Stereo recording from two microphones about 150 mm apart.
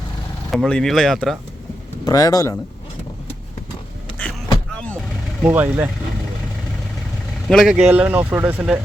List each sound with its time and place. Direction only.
0.5 s speech: 5° left (ahead or behind)
2.0 s speech: 25° left (ahead or behind)
5.4 s speech: 10° right (ahead or behind)
7.4 s speech: 5° right (ahead or behind)